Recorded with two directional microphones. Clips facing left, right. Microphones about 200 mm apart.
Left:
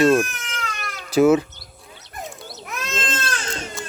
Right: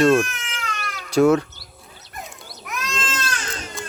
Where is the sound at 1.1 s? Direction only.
5° left (ahead or behind).